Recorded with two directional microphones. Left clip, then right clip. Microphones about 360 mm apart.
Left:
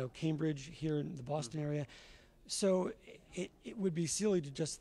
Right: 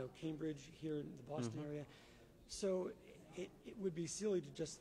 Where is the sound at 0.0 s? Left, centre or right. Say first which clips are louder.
Left 8 dB; left.